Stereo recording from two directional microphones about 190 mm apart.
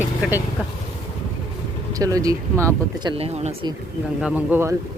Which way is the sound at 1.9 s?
20° right (ahead or behind).